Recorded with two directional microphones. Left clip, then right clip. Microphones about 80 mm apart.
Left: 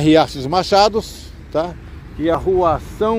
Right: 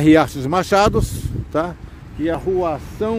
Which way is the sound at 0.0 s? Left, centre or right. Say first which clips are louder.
Even; right.